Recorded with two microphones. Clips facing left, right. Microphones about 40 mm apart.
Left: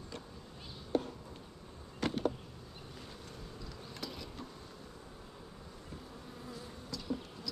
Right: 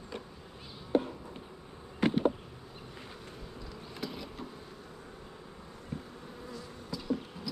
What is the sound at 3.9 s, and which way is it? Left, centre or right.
Insect, centre.